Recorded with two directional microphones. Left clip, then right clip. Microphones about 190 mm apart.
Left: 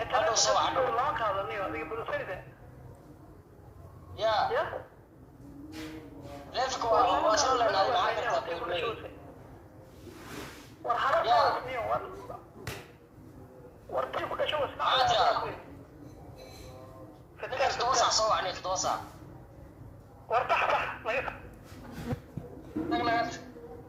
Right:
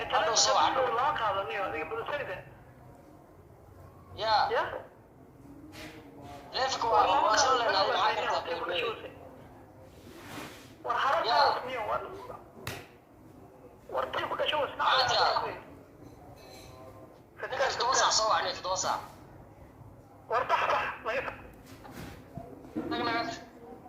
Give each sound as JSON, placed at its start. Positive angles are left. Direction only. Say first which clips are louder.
{"t": 0.1, "sound": "a man's voice", "louder": "right 1 dB", "side_deg": -15}
{"t": 4.2, "sound": "a man's voice", "louder": "right 1 dB", "side_deg": -15}
{"t": 6.5, "sound": "a man's voice", "louder": "even", "side_deg": -15}
{"t": 10.8, "sound": "a man's voice", "louder": "left 1 dB", "side_deg": -10}
{"t": 13.9, "sound": "a man's voice", "louder": "even", "side_deg": -10}
{"t": 17.5, "sound": "a man's voice", "louder": "left 1 dB", "side_deg": -10}
{"t": 20.3, "sound": "speech", "louder": "left 1 dB", "side_deg": 0}
{"t": 22.9, "sound": "a man's voice", "louder": "left 3 dB", "side_deg": -15}